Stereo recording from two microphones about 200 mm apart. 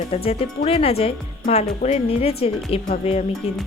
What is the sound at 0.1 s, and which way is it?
Speech, 30° left (ahead or behind).